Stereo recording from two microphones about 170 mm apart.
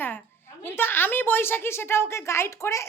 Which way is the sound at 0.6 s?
15° left (ahead or behind).